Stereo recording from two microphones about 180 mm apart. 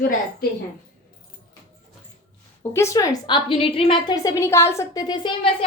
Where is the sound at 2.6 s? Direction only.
15° left (ahead or behind).